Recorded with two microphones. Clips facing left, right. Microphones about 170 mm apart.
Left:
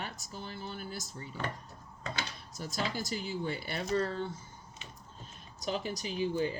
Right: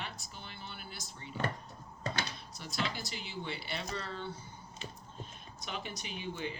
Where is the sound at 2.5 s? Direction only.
45° left (ahead or behind).